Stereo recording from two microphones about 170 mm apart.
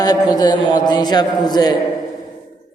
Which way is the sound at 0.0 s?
25° left (ahead or behind).